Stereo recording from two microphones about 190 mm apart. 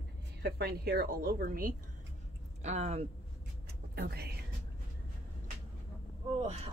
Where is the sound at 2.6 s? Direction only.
35° right (ahead or behind).